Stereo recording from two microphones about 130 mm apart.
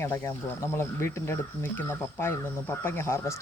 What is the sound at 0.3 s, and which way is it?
Speech, 20° left (ahead or behind).